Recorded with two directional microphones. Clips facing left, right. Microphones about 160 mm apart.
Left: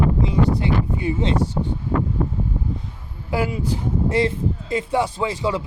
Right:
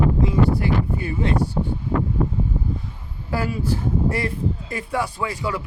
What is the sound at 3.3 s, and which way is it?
Speech, 15° left (ahead or behind).